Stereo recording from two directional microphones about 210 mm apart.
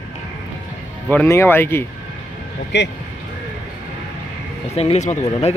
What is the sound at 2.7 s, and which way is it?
Speech, 55° left (ahead or behind).